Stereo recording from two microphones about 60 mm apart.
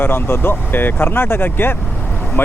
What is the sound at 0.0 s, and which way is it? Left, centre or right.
Speech, left.